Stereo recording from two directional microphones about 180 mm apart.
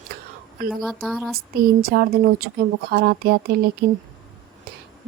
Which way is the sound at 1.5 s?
55° right (ahead or behind).